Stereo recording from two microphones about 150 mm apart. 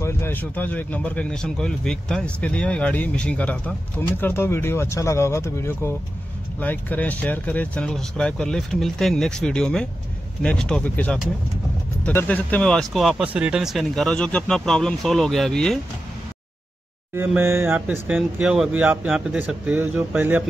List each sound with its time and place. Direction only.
0.0 s speech: 15° left (ahead or behind)
17.4 s speech: 15° right (ahead or behind)